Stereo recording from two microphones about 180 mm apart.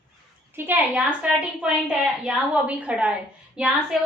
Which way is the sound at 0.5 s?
10° right (ahead or behind).